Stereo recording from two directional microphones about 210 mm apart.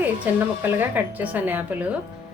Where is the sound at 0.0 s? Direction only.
10° right (ahead or behind).